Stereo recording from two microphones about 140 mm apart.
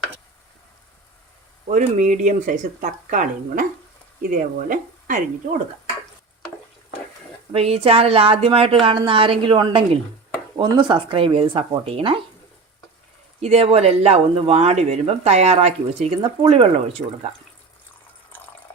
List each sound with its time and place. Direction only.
1.6 s speech: 60° right (ahead or behind)
7.5 s a woman's voice: 45° right (ahead or behind)
13.4 s speech: 45° right (ahead or behind)
18.3 s water: 15° left (ahead or behind)